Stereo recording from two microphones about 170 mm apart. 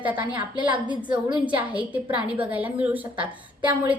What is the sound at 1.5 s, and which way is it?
A woman's voice, 10° right (ahead or behind).